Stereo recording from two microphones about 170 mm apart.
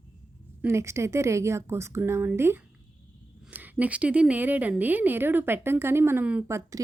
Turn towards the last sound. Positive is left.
turn(degrees=-20)  # may be behind; listen again after turning